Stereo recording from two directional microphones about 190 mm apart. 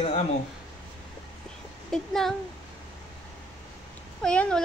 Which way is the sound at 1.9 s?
Centre (ahead or behind).